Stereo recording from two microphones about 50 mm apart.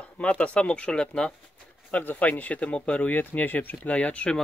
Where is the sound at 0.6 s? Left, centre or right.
Centre.